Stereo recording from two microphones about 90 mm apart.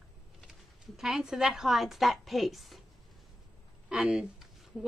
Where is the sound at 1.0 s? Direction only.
5° right (ahead or behind).